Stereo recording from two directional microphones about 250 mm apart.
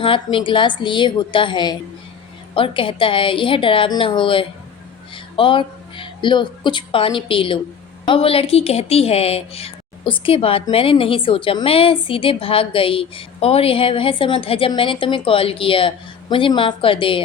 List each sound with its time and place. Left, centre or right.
0.0 s a woman's voice: left